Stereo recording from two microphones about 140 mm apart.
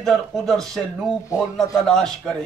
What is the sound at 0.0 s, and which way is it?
Speech, 5° left (ahead or behind).